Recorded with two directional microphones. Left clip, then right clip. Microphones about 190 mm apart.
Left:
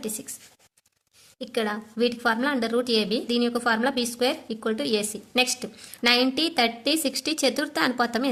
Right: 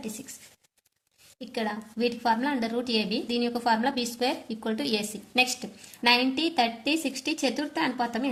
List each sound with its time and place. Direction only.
1.4 s a woman's voice: 25° left (ahead or behind)